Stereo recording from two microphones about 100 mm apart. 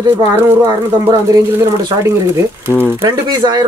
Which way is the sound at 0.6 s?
45° right (ahead or behind).